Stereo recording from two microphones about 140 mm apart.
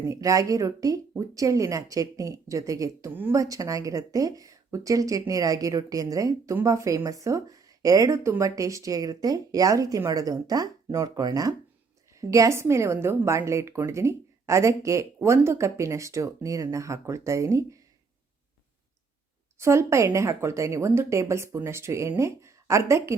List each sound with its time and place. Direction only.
0.1 s speech: 25° right (ahead or behind)
19.5 s speech: 20° right (ahead or behind)